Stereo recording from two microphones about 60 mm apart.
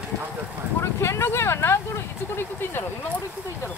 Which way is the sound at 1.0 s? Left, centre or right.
Left.